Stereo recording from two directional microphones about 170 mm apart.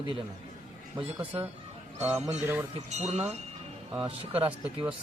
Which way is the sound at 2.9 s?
40° right (ahead or behind).